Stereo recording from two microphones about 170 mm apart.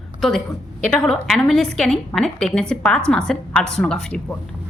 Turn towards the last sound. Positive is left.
turn(degrees=5)  # may be behind; listen again after turning